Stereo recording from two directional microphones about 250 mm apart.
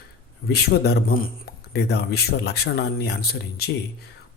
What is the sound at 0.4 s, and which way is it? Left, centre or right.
A man's voice, left.